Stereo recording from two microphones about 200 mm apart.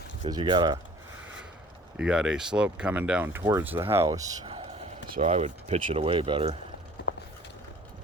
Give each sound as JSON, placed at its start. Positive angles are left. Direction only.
{"t": 0.3, "sound": "speech", "side_deg": -20}
{"t": 2.0, "sound": "speech", "side_deg": -5}
{"t": 7.1, "sound": "a sound", "side_deg": 60}